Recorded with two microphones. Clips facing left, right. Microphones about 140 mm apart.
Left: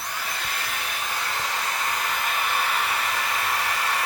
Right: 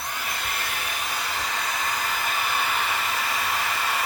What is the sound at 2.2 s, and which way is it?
Hair dryer, centre (ahead or behind).